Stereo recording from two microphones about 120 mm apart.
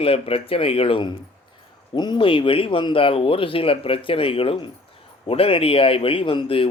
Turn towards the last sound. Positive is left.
turn(degrees=50)  # may be behind; listen again after turning